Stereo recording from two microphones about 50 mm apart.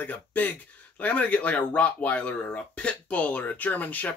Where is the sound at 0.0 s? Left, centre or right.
Left.